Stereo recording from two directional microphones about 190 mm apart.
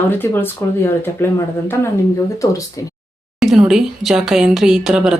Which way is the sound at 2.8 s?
20° left (ahead or behind).